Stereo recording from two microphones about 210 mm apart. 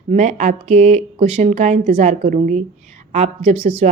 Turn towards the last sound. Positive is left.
turn(degrees=-25)  # may be behind; listen again after turning